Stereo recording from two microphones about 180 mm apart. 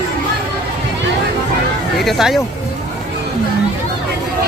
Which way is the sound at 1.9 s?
Centre (ahead or behind).